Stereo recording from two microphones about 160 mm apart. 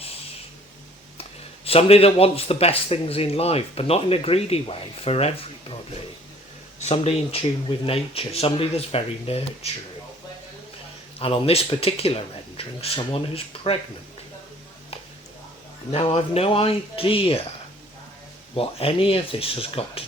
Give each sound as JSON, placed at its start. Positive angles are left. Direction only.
{"t": 1.2, "sound": "speech", "side_deg": 40}
{"t": 6.7, "sound": "speech", "side_deg": 40}
{"t": 11.2, "sound": "speech", "side_deg": 35}
{"t": 15.9, "sound": "speech", "side_deg": 40}
{"t": 18.5, "sound": "speech", "side_deg": 35}